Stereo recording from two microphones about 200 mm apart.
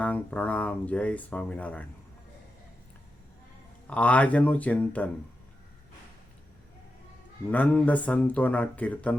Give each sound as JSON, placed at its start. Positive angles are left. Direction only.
{"t": 0.0, "sound": "speech", "side_deg": 5}
{"t": 3.8, "sound": "speech", "side_deg": 5}
{"t": 7.5, "sound": "speech", "side_deg": 5}